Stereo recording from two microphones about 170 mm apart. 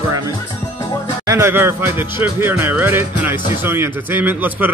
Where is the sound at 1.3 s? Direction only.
15° right (ahead or behind).